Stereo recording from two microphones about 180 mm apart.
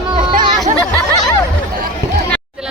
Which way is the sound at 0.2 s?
45° right (ahead or behind).